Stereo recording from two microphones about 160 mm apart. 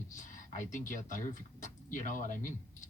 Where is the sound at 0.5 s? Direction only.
50° left (ahead or behind).